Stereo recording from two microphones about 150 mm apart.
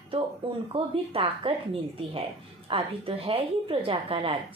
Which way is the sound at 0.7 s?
35° right (ahead or behind).